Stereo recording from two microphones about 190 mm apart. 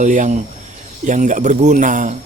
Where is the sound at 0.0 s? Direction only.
40° right (ahead or behind).